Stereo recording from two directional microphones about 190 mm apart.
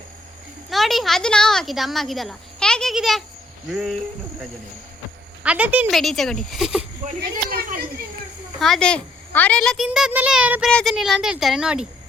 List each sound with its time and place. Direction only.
0.7 s a woman's voice: centre (ahead or behind)
5.4 s a woman's voice: 5° right (ahead or behind)
7.2 s speech: 55° right (ahead or behind)
8.5 s a woman's voice: centre (ahead or behind)